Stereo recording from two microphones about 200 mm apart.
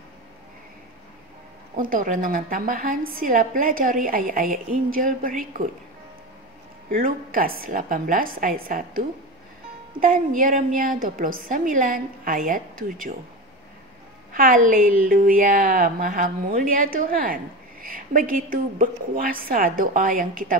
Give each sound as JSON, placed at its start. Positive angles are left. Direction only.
{"t": 1.8, "sound": "a woman's voice", "side_deg": -45}
{"t": 6.9, "sound": "a woman's voice", "side_deg": -45}
{"t": 14.3, "sound": "a woman's voice", "side_deg": -45}